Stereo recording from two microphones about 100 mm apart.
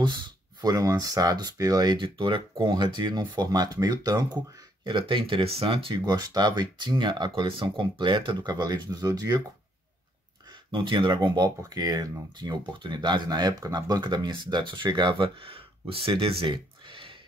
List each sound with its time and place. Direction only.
0.6 s speech: 40° right (ahead or behind)
2.0 s speech: 55° right (ahead or behind)
4.8 s speech: 55° right (ahead or behind)
6.0 s speech: 45° right (ahead or behind)
10.7 s speech: 55° right (ahead or behind)